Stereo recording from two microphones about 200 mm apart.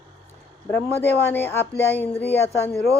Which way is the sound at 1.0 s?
10° left (ahead or behind).